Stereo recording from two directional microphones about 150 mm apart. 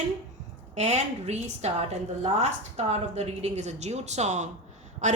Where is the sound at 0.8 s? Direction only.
50° right (ahead or behind).